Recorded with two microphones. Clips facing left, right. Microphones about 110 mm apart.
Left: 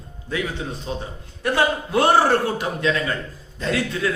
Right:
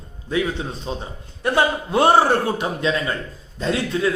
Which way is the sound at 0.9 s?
25° right (ahead or behind).